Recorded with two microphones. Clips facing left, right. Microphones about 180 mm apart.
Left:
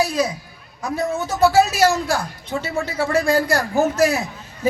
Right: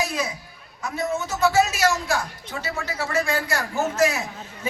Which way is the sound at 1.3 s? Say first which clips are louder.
Left 5 dB; 35° left (ahead or behind).